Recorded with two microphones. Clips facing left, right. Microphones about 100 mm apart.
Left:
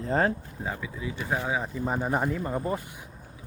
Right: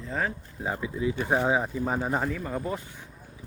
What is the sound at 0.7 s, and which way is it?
Speech, 25° right (ahead or behind).